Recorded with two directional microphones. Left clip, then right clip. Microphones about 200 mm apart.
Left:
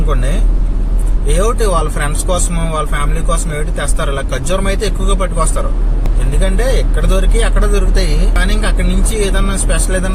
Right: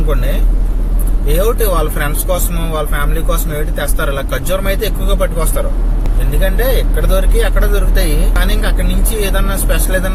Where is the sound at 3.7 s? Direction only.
15° left (ahead or behind).